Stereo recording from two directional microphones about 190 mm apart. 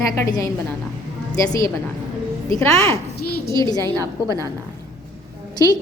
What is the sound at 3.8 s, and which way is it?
Speech, 20° right (ahead or behind).